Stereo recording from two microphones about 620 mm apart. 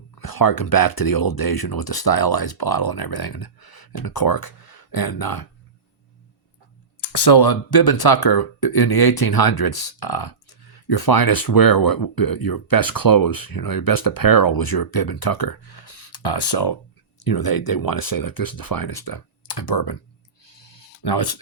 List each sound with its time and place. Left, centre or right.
0.2 s speech: left
7.1 s speech: left
20.4 s a sound: left